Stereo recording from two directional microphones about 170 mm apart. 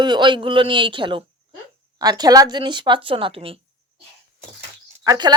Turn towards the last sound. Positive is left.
turn(degrees=-25)  # may be behind; listen again after turning